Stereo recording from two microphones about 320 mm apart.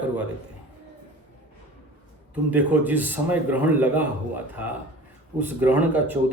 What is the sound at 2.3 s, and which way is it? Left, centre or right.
Speech, centre.